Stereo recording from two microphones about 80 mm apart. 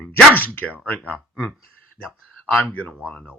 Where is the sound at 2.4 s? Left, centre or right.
Centre.